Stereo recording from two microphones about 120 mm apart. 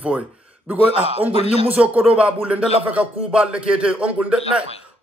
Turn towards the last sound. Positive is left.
turn(degrees=-10)  # may be behind; listen again after turning